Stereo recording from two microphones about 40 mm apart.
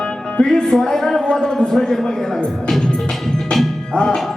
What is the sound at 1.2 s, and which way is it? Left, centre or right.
Speech, left.